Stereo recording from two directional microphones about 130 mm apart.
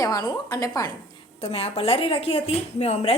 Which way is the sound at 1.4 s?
50° left (ahead or behind).